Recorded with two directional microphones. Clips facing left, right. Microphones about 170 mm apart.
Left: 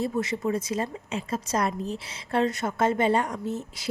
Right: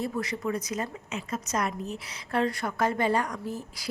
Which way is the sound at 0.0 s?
25° left (ahead or behind).